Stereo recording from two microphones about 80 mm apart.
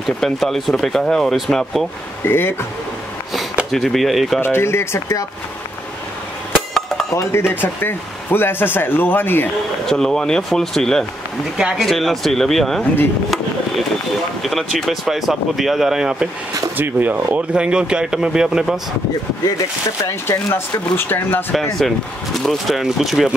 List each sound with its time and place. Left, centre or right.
0.0 s speech: centre
2.2 s speech: left
3.7 s speech: centre
4.4 s speech: left
7.1 s speech: left
7.6 s speech: left
9.8 s speech: centre
11.5 s speech: centre
14.4 s speech: centre
16.7 s speech: right; by 18.8 s centre
20.2 s speech: left
21.5 s speech: centre